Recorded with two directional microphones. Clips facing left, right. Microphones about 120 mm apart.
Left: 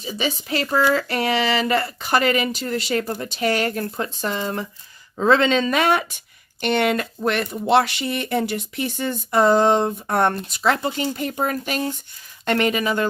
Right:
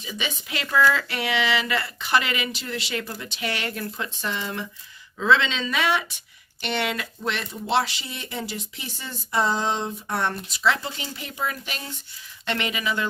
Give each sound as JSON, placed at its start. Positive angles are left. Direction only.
{"t": 0.0, "sound": "speech", "side_deg": 35}